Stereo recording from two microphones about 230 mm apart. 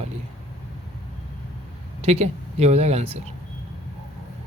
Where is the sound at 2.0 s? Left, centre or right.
Right.